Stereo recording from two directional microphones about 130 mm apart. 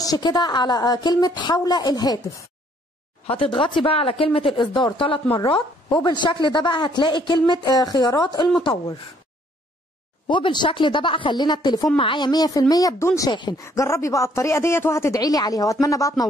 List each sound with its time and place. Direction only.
0.0 s speech: 30° left (ahead or behind)
3.3 s speech: 45° left (ahead or behind)
10.2 s speech: 35° left (ahead or behind)
13.3 s speech: 35° left (ahead or behind)
13.6 s speech: 20° left (ahead or behind)